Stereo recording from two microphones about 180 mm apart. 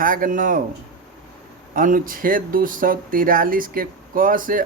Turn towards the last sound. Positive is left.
turn(degrees=-50)  # may be behind; listen again after turning